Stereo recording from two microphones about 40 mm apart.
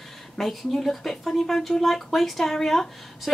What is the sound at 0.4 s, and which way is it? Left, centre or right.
Speech, centre.